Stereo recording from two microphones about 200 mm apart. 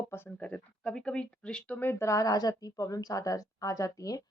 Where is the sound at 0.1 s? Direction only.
10° left (ahead or behind).